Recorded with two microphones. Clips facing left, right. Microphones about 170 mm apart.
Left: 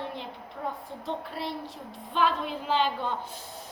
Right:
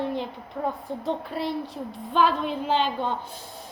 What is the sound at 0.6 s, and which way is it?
Speech, 55° right (ahead or behind).